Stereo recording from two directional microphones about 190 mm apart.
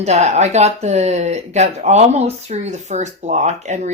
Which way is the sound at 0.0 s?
35° right (ahead or behind).